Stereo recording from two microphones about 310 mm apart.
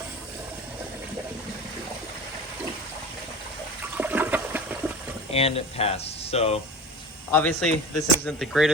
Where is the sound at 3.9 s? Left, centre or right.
Centre.